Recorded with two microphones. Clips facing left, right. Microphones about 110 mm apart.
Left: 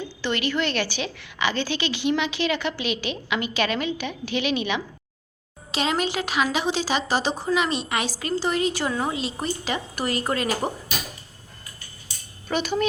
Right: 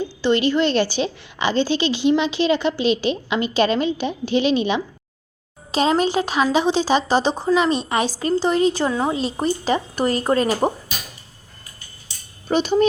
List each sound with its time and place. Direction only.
0.2 s a woman's voice: 25° right (ahead or behind)
12.5 s a woman's voice: 25° right (ahead or behind)